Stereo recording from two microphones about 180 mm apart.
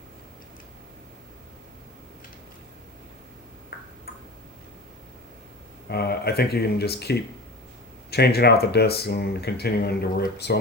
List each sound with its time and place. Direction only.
3.7 s tick-tock: 60° left (ahead or behind)
5.9 s speech: 60° left (ahead or behind)